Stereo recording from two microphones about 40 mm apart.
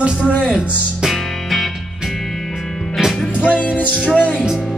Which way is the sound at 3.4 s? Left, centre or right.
Left.